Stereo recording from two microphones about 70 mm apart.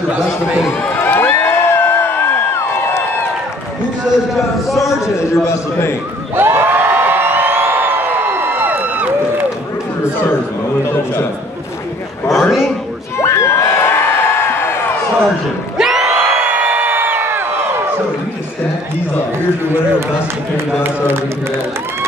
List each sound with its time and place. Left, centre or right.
0.7 s crowd: left
4.8 s a man's voice: left
6.3 s crowd: right
12.3 s a sound: centre
13.2 s crowd: left
15.8 s crowd: centre; by 17.6 s right